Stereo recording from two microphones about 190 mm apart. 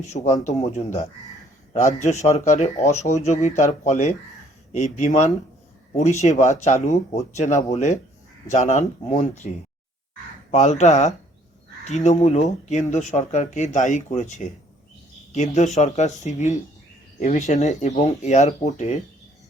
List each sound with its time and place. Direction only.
0.4 s speech: 35° left (ahead or behind)
10.5 s speech: 40° left (ahead or behind)